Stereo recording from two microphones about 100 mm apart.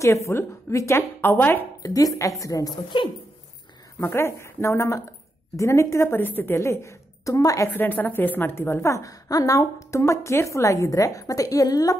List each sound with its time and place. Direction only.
0.0 s a woman's voice: 30° left (ahead or behind)
1.8 s a woman's voice: 35° left (ahead or behind)
2.7 s speech: 55° left (ahead or behind)
4.0 s a woman's voice: 25° left (ahead or behind)
7.7 s a woman's voice: 20° left (ahead or behind); by 12.0 s 40° left (ahead or behind)